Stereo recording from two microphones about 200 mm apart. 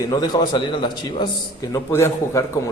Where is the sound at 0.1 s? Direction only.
20° left (ahead or behind).